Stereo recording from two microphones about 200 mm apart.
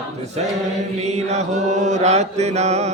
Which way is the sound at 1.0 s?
35° right (ahead or behind).